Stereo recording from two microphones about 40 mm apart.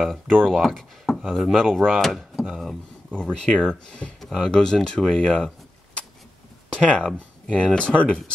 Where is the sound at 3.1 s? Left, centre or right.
Left.